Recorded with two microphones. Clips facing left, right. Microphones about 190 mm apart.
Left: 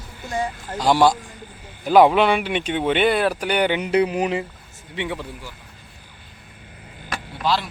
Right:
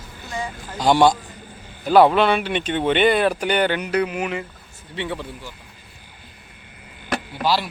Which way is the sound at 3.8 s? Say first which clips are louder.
Left 3 dB; 25° left (ahead or behind).